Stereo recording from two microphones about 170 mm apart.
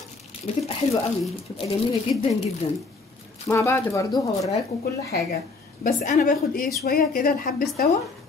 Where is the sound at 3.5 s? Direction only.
15° left (ahead or behind).